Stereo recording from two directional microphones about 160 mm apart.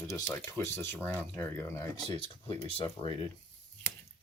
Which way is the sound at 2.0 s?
30° left (ahead or behind).